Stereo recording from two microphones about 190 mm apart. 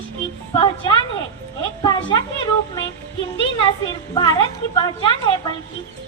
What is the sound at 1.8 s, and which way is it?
Speech, 20° left (ahead or behind).